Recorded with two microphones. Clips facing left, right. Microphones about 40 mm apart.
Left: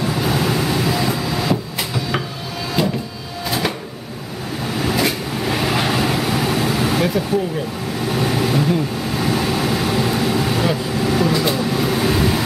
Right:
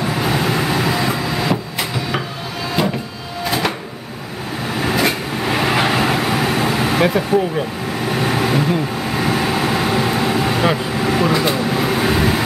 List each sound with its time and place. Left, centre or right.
0.0 s vehicle: centre
3.4 s a sound: centre
4.6 s vehicle: centre